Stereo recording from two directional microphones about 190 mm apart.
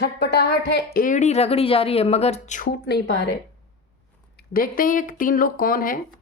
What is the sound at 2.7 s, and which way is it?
Speech, 60° left (ahead or behind).